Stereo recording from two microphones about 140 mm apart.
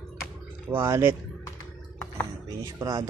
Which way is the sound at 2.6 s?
25° right (ahead or behind).